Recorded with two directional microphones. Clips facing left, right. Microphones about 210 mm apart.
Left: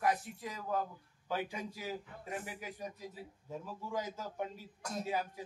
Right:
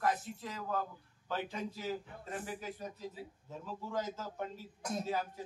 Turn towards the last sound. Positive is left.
turn(degrees=15)  # may be behind; listen again after turning